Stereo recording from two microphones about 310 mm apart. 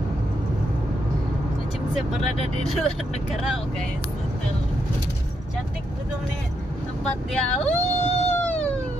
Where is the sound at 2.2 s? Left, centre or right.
Centre.